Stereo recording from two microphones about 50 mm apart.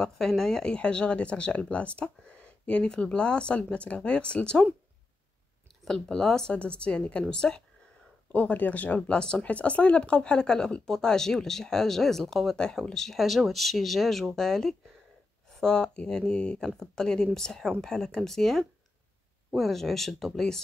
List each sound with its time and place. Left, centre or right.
0.0 s speech: centre
5.9 s speech: centre
6.6 s speech: left
8.3 s speech: left; by 20.6 s centre